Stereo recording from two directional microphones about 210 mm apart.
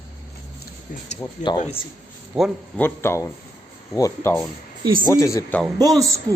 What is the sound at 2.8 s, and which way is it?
Speech, 10° left (ahead or behind).